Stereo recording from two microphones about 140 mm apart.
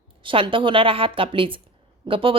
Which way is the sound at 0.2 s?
35° right (ahead or behind).